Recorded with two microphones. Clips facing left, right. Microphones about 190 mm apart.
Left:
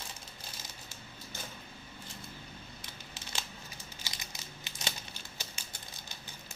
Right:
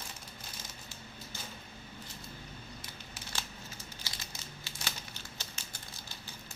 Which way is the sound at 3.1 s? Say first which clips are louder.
Even; 20° left (ahead or behind).